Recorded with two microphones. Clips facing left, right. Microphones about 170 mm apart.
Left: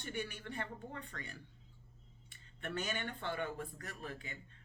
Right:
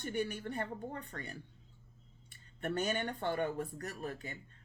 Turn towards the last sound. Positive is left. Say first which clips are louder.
# right 5 dB
turn(degrees=-40)  # may be behind; listen again after turning